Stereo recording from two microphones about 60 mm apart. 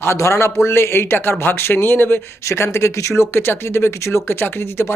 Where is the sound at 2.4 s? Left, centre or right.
Left.